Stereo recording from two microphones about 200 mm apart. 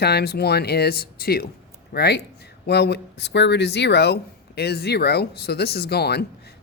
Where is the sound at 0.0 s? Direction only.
55° left (ahead or behind).